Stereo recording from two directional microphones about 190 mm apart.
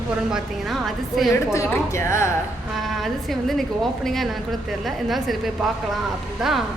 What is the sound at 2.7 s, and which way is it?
A woman's voice, centre (ahead or behind).